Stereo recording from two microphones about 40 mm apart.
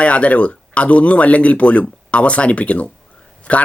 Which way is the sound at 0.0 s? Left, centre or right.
Left.